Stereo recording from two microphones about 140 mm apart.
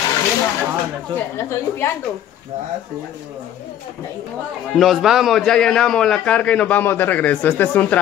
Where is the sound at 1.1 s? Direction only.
20° left (ahead or behind).